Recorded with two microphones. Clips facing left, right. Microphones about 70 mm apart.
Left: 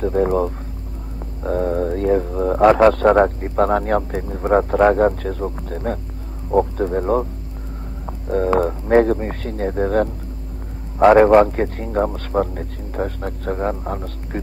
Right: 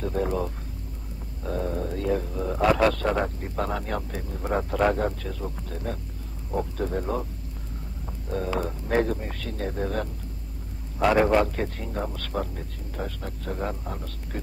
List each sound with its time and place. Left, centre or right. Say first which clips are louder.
0.0 s speech: left 9 dB; left
8.3 s speech: left 11 dB; left